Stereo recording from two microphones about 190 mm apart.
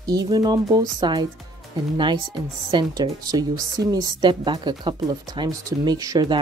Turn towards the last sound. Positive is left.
turn(degrees=-20)  # may be behind; listen again after turning